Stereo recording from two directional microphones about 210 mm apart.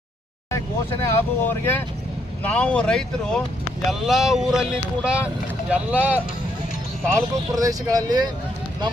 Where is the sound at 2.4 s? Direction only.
5° left (ahead or behind).